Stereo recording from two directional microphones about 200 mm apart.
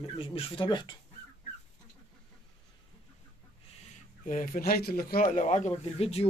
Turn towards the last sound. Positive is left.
turn(degrees=30)  # may be behind; listen again after turning